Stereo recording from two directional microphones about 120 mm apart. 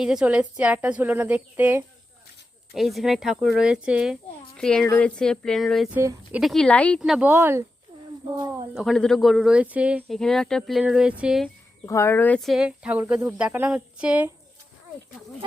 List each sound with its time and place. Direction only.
0.0 s speech: 5° right (ahead or behind)
2.7 s speech: centre (ahead or behind)
4.5 s speech: 5° left (ahead or behind)
7.0 s speech: 10° right (ahead or behind)
8.7 s speech: centre (ahead or behind)
10.1 s speech: 5° left (ahead or behind)
11.9 s speech: 25° left (ahead or behind)
12.4 s speech: centre (ahead or behind)